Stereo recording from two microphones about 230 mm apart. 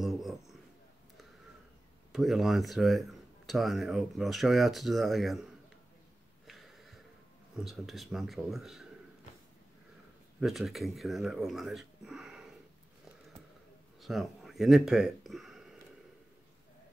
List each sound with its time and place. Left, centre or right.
0.0 s a sound: centre
2.1 s speech: centre
6.4 s a sound: centre
7.5 s speech: centre
10.4 s speech: centre
14.0 s speech: centre